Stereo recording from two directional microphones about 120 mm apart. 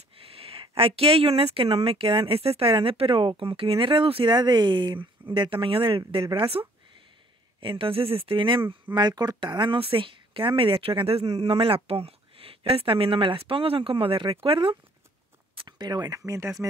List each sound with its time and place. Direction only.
0.2 s speech: 50° right (ahead or behind)
6.6 s speech: 30° right (ahead or behind)
7.6 s speech: 45° right (ahead or behind)
15.5 s a sound: 40° right (ahead or behind)
16.3 s speech: 25° right (ahead or behind)